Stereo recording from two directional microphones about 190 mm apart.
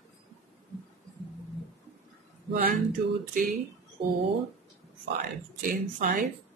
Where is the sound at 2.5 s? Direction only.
45° right (ahead or behind).